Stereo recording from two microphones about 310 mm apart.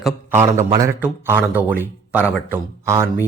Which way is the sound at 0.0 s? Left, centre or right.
Centre.